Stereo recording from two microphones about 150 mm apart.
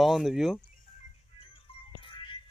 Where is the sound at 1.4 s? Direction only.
35° left (ahead or behind).